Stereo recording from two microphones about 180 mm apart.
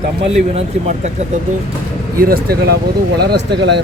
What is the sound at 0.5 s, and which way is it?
Speech, 35° right (ahead or behind).